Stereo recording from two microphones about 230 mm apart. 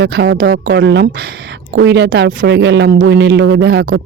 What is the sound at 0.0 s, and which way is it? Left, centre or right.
Speech, right.